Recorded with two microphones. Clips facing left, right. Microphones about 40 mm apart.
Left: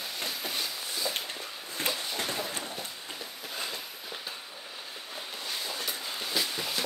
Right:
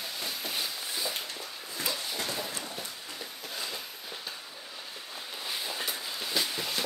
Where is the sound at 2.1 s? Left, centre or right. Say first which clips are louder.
Left 1 dB; centre.